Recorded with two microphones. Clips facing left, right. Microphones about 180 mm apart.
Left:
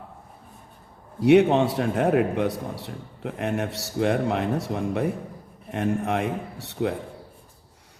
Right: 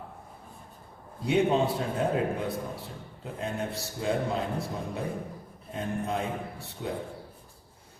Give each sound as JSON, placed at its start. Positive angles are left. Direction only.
{"t": 1.2, "sound": "a man's voice", "side_deg": 75}